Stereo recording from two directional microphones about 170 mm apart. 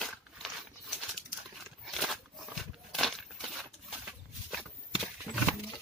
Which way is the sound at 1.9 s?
Centre (ahead or behind).